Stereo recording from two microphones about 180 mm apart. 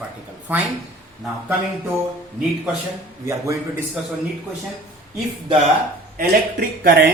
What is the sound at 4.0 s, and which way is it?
Speech, 5° right (ahead or behind).